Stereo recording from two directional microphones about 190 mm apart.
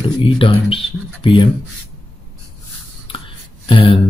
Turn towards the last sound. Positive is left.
turn(degrees=30)  # may be behind; listen again after turning